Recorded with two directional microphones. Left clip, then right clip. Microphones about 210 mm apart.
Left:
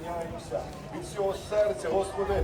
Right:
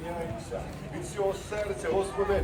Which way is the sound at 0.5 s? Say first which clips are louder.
Left 3 dB; 45° left (ahead or behind).